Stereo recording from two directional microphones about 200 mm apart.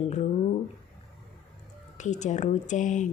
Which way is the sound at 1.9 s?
35° left (ahead or behind).